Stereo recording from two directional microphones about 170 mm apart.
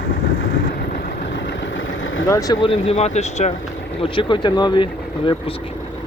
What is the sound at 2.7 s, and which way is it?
Speech, 35° left (ahead or behind).